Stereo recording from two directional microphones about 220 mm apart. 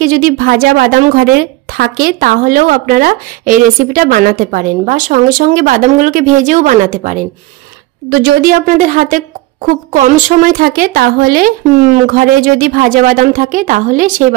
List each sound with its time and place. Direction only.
0.0 s a woman's voice: 40° right (ahead or behind)